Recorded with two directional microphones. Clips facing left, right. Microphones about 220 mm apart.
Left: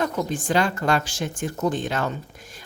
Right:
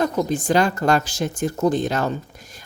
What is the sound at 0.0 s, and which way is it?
A woman's voice, 40° right (ahead or behind).